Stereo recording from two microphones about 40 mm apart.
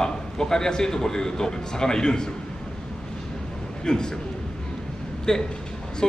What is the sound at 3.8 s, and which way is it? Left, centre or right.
Speech, centre.